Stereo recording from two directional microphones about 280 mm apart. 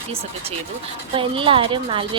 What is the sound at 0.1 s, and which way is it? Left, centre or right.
A woman's voice, right.